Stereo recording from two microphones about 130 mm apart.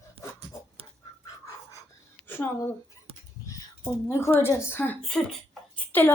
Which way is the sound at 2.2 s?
15° left (ahead or behind).